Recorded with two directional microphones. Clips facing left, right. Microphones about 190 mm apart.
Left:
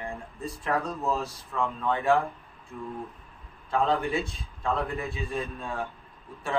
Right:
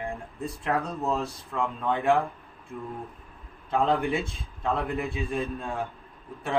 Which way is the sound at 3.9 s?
15° right (ahead or behind).